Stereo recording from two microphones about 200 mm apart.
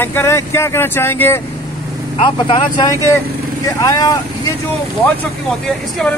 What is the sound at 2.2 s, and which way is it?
Speech, 25° left (ahead or behind).